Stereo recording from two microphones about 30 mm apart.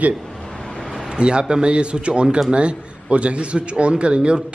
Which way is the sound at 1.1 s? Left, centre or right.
Right.